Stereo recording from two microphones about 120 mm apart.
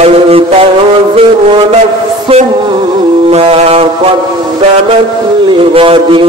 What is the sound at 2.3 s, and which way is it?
Music, 50° right (ahead or behind).